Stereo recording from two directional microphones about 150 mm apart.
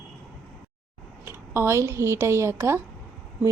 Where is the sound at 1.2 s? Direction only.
15° right (ahead or behind).